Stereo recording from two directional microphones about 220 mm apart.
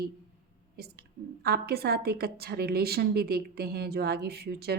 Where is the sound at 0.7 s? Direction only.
45° right (ahead or behind).